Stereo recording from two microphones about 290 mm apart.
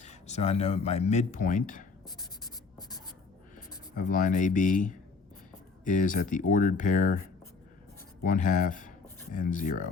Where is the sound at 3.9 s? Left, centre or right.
Left.